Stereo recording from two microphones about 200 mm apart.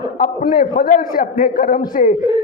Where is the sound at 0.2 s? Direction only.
45° left (ahead or behind).